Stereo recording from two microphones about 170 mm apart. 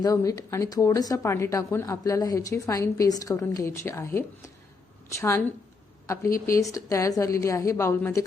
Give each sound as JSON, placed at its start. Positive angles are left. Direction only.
{"t": 0.0, "sound": "a woman's voice", "side_deg": 20}